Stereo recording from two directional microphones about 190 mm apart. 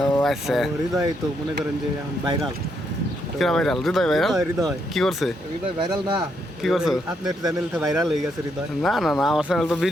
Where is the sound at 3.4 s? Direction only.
Centre (ahead or behind).